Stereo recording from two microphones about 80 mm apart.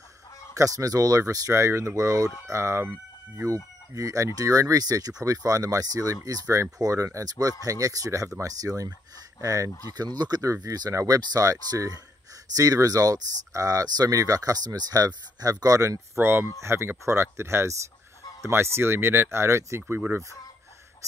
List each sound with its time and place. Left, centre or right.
0.6 s speech: right
16.2 s speech: right